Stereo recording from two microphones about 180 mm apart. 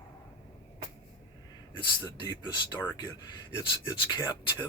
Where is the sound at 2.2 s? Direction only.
25° left (ahead or behind).